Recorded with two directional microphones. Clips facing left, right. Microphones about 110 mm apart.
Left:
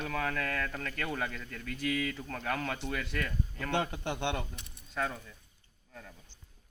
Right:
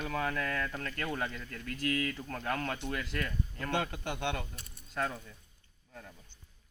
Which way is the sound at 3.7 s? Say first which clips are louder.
Left 2 dB; 25° left (ahead or behind).